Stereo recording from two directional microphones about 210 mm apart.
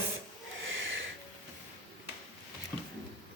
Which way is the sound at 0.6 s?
70° right (ahead or behind).